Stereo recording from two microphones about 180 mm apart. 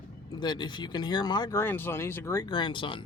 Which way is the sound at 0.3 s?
25° left (ahead or behind).